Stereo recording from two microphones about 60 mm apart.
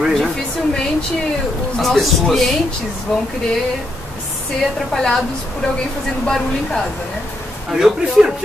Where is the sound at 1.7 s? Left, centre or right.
Centre.